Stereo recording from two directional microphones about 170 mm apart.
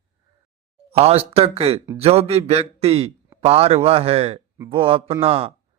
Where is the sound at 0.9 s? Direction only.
35° right (ahead or behind).